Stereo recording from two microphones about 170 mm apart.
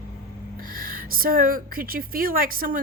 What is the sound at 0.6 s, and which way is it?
A woman's voice, 55° right (ahead or behind).